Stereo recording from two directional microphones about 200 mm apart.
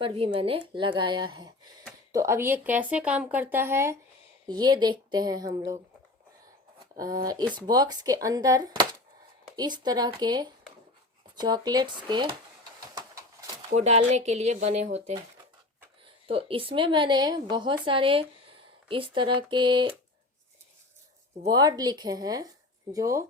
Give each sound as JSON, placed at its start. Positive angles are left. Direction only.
{"t": 0.0, "sound": "a woman's voice", "side_deg": -30}
{"t": 6.9, "sound": "a woman's voice", "side_deg": -20}
{"t": 12.9, "sound": "vehicle", "side_deg": -20}
{"t": 13.7, "sound": "speech", "side_deg": -35}
{"t": 16.2, "sound": "a woman's voice", "side_deg": -25}
{"t": 21.4, "sound": "a woman's voice", "side_deg": -20}